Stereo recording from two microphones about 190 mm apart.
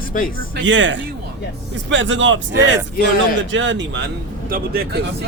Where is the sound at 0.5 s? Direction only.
75° right (ahead or behind).